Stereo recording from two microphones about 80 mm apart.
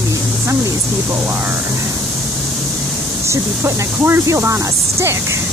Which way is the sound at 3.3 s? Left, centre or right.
Right.